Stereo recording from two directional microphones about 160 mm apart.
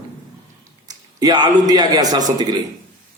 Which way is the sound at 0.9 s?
25° right (ahead or behind).